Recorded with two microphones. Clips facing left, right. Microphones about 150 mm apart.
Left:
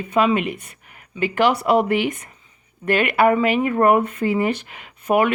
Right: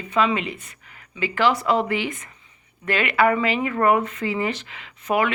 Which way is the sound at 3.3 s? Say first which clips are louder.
Left 4 dB; 50° left (ahead or behind).